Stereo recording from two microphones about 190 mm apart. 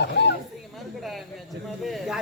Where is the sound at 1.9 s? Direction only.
Centre (ahead or behind).